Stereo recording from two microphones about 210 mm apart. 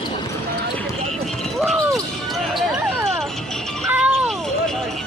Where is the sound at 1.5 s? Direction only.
Centre (ahead or behind).